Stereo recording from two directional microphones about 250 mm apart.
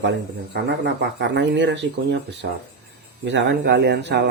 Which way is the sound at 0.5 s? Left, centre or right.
Right.